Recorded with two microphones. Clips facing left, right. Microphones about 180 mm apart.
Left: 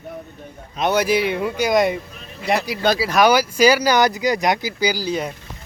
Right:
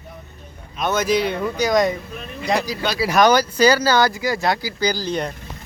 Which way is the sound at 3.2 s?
10° left (ahead or behind).